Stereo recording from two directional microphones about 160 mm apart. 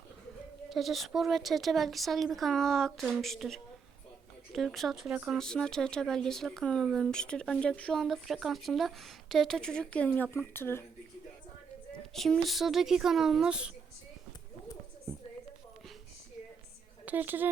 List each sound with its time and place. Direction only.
0.7 s speech: centre (ahead or behind)
12.1 s speech: centre (ahead or behind)
17.1 s a woman's voice: 10° right (ahead or behind)